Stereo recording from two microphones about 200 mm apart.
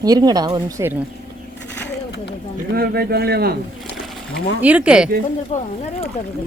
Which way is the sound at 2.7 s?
50° right (ahead or behind).